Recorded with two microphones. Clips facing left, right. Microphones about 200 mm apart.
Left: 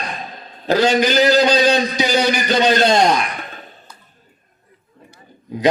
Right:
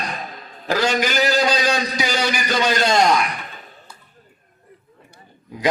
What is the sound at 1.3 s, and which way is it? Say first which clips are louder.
Speech: left 5 dB; 35° left (ahead or behind).